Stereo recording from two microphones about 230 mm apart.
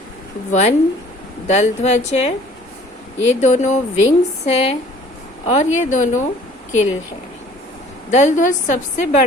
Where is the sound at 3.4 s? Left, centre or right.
Left.